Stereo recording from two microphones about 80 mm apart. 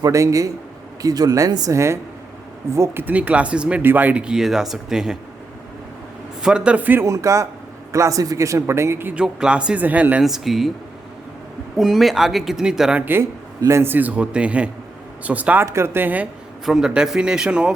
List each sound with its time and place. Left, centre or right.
0.0 s speech: right
1.0 s speech: right
1.7 s a man's voice: right
3.0 s speech: right
6.4 s speech: centre
7.0 s a man's voice: right
9.1 s speech: centre
10.2 s speech: centre
11.8 s speech: centre
13.0 s a man's voice: right
13.6 s a man's voice: right; by 15.6 s centre
15.6 s a man's voice: right
16.6 s speech: centre